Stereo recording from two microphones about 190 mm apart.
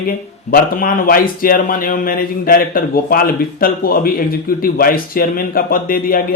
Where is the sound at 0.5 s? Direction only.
50° left (ahead or behind).